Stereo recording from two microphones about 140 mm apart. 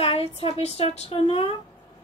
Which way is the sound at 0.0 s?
45° left (ahead or behind).